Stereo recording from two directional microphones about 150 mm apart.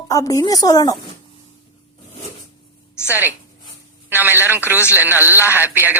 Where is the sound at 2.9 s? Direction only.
15° left (ahead or behind).